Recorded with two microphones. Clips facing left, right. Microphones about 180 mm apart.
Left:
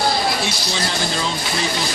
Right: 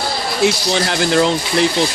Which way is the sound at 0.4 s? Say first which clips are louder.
Right 8 dB; 75° right (ahead or behind).